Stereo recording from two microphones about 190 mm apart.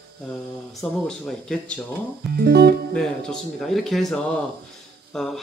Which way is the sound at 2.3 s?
55° right (ahead or behind).